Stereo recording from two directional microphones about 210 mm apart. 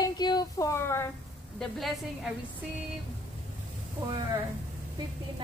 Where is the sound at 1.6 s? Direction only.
Centre (ahead or behind).